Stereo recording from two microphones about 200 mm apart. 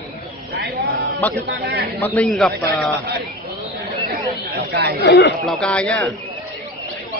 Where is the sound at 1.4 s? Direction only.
55° right (ahead or behind).